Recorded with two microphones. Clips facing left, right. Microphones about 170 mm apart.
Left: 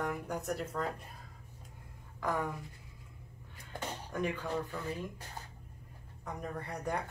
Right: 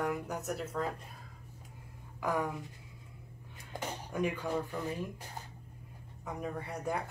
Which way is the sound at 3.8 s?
10° right (ahead or behind).